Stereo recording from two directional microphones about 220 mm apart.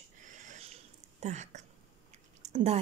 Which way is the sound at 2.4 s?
30° right (ahead or behind).